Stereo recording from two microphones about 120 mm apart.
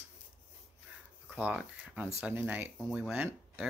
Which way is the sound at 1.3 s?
10° right (ahead or behind).